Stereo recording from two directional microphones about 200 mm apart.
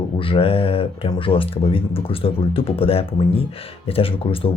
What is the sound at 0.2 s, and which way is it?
Speech, 25° left (ahead or behind).